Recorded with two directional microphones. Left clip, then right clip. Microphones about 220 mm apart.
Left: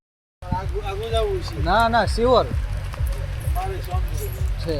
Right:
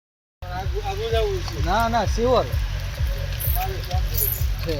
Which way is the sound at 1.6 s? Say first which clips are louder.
Left 3 dB; 25° left (ahead or behind).